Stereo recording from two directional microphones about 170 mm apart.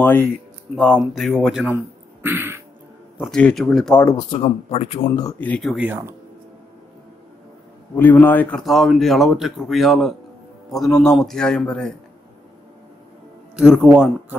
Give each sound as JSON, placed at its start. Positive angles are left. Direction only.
{"t": 0.0, "sound": "speech", "side_deg": 10}
{"t": 3.2, "sound": "speech", "side_deg": 5}
{"t": 4.2, "sound": "speech", "side_deg": 30}
{"t": 5.4, "sound": "speech", "side_deg": 5}
{"t": 7.9, "sound": "speech", "side_deg": 10}
{"t": 13.6, "sound": "speech", "side_deg": -5}